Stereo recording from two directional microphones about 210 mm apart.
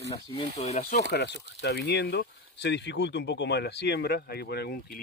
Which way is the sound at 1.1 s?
50° left (ahead or behind).